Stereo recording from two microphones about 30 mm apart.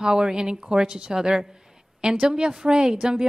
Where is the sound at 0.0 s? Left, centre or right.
Right.